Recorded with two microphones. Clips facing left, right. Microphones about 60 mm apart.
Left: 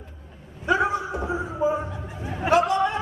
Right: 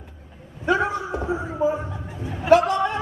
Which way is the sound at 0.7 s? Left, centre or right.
Left.